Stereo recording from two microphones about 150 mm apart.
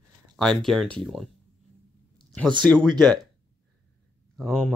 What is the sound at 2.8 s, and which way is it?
Speech, 30° right (ahead or behind).